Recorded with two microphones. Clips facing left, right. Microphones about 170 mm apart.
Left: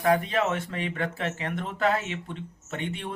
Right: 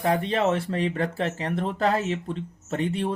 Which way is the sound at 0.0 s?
30° right (ahead or behind).